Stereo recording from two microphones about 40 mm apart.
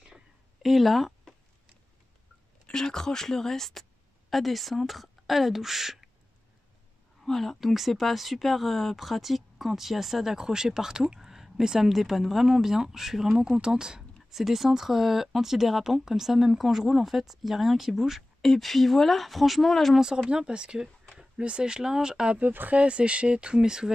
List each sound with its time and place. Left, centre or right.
0.6 s speech: centre
2.6 s speech: centre
7.2 s speech: centre
14.3 s speech: centre
18.4 s speech: centre
20.2 s speech: right
22.4 s speech: right
22.7 s speech: right